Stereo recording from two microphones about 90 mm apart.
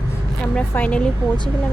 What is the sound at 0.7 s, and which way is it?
Speech, 15° left (ahead or behind).